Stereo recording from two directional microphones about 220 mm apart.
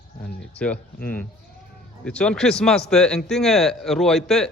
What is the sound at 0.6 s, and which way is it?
Speech, 5° left (ahead or behind).